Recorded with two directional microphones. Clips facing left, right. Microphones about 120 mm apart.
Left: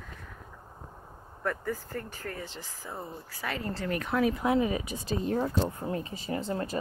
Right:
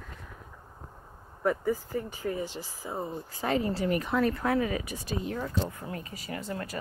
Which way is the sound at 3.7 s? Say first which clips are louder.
Right 2 dB; 10° right (ahead or behind).